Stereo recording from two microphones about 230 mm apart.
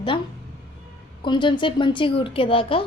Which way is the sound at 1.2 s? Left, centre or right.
Left.